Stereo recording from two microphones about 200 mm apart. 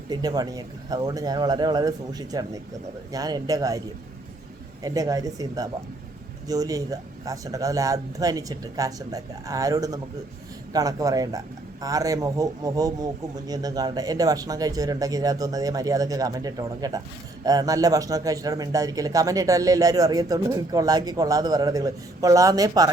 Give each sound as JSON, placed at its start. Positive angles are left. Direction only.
{"t": 0.1, "sound": "speech", "side_deg": -20}